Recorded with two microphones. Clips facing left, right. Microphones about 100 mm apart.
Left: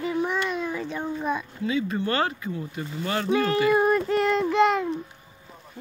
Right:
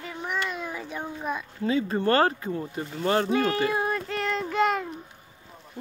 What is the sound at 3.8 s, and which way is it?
A child's voice, 10° left (ahead or behind).